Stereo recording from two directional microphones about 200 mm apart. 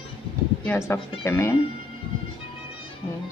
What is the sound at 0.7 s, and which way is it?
Speech, 10° left (ahead or behind).